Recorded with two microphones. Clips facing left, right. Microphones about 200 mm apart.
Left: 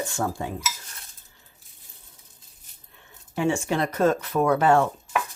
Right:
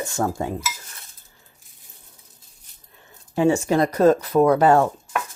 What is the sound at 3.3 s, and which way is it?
Speech, 35° right (ahead or behind).